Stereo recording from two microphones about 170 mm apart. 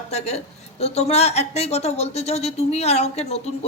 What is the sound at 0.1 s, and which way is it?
Speech, 40° left (ahead or behind).